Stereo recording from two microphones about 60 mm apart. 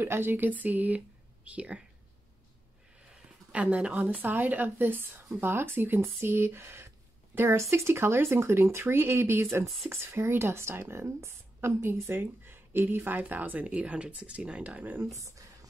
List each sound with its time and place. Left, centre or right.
0.0 s speech: right
3.5 s a woman's voice: right
15.0 s speech: right